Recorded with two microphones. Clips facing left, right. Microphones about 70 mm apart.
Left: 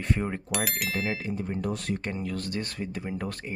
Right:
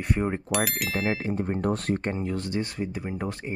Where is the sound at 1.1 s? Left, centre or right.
Right; by 3.5 s centre.